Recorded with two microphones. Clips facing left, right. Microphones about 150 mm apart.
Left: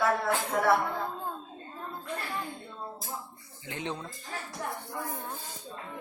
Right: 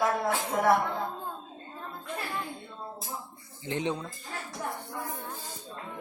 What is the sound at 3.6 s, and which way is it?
Speech, 25° right (ahead or behind).